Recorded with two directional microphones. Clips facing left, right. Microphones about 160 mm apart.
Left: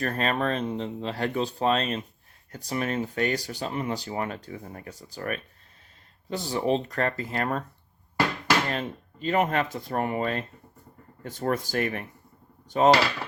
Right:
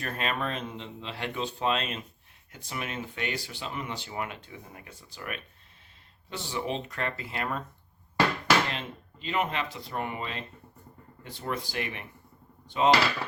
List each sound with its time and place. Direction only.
0.0 s speech: 40° left (ahead or behind)
8.7 s speech: 45° left (ahead or behind)